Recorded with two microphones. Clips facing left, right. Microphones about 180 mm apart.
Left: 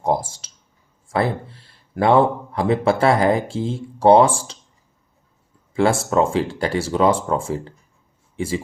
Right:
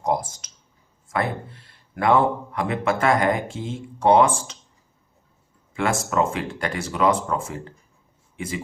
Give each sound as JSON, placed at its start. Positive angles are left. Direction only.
{"t": 0.0, "sound": "speech", "side_deg": 30}
{"t": 5.7, "sound": "speech", "side_deg": 30}